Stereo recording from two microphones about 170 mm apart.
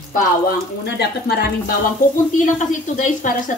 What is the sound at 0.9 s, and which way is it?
Speech, 70° left (ahead or behind).